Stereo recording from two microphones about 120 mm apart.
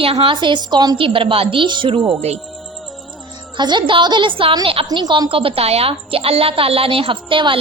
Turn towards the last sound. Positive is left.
turn(degrees=-45)  # may be behind; listen again after turning